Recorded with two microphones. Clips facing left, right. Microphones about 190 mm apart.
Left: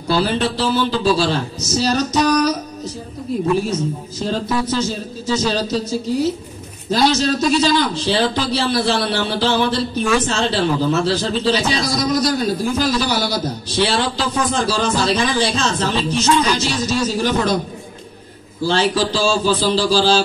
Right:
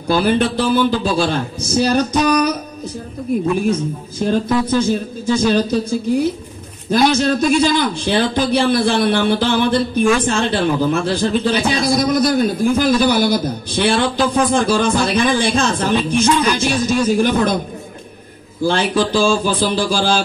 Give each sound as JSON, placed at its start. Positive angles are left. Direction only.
{"t": 0.1, "sound": "a man's voice", "side_deg": -55}
{"t": 3.3, "sound": "a man's voice", "side_deg": -50}
{"t": 18.6, "sound": "a man's voice", "side_deg": -55}